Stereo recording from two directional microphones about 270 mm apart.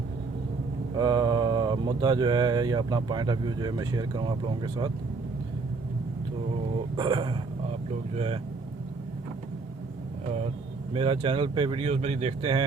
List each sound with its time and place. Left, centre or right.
0.9 s speech: centre
6.9 s speech: centre
10.9 s speech: centre